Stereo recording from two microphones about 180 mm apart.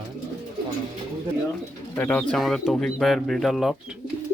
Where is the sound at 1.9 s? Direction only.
10° left (ahead or behind).